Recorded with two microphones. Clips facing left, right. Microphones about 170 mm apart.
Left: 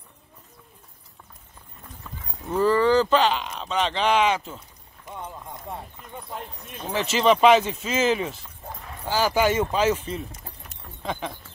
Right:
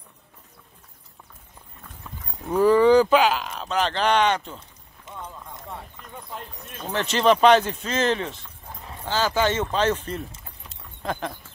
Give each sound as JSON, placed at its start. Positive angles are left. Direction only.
{"t": 2.5, "sound": "speech", "side_deg": -15}
{"t": 5.0, "sound": "clip-clop", "side_deg": 20}
{"t": 6.7, "sound": "speech", "side_deg": 0}